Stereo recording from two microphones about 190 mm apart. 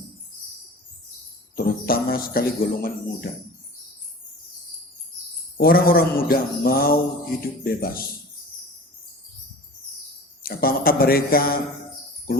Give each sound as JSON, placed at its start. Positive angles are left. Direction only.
{"t": 1.5, "sound": "speech", "side_deg": 50}
{"t": 5.5, "sound": "speech", "side_deg": 50}
{"t": 10.4, "sound": "speech", "side_deg": 50}